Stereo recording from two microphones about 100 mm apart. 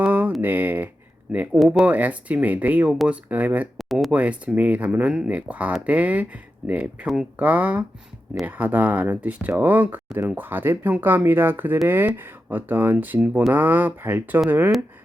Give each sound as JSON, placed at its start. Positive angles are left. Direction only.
{"t": 0.0, "sound": "a sound", "side_deg": -15}
{"t": 0.4, "sound": "speech", "side_deg": -20}
{"t": 3.8, "sound": "speech", "side_deg": 0}
{"t": 4.1, "sound": "speech", "side_deg": -15}